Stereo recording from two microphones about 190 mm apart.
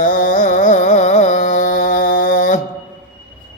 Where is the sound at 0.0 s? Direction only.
45° left (ahead or behind).